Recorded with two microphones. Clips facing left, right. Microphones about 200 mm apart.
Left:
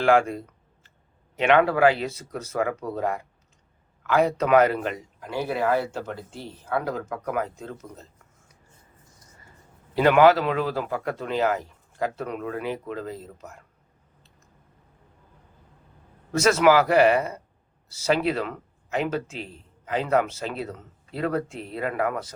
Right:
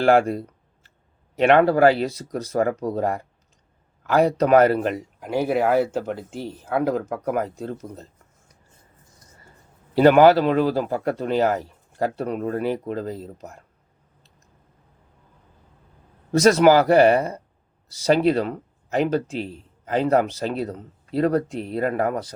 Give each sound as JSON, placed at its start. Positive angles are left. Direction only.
{"t": 0.0, "sound": "a sound", "side_deg": -40}
{"t": 1.4, "sound": "speech", "side_deg": -40}
{"t": 9.9, "sound": "speech", "side_deg": -35}
{"t": 16.4, "sound": "speech", "side_deg": -35}
{"t": 21.5, "sound": "speech", "side_deg": 0}
{"t": 21.8, "sound": "speech", "side_deg": -40}